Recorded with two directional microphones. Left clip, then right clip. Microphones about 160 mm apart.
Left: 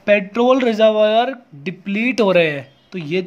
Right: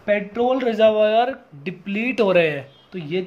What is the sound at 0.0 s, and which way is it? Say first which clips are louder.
Speech: left 5 dB; 35° left (ahead or behind).